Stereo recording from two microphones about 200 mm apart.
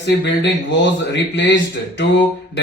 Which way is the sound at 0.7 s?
65° left (ahead or behind).